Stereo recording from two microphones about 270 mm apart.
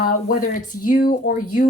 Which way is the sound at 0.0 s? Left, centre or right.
Left.